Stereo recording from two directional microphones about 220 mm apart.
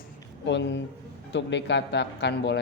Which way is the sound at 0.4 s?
55° left (ahead or behind).